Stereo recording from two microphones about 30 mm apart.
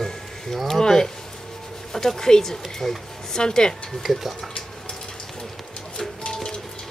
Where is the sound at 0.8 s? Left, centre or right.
Centre.